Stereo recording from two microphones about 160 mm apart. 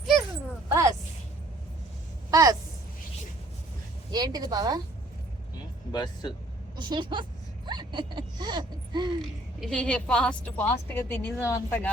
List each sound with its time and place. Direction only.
0.7 s a sound: 20° right (ahead or behind)
2.3 s a sound: 25° right (ahead or behind)
4.1 s speech: 25° right (ahead or behind)
5.9 s speech: 25° left (ahead or behind)
6.7 s a woman's voice: 30° right (ahead or behind)
9.6 s a woman's voice: 5° left (ahead or behind)